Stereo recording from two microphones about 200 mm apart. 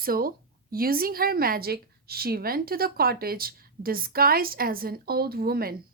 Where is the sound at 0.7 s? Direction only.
50° right (ahead or behind).